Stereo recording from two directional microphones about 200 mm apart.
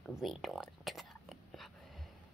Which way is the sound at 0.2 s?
Centre (ahead or behind).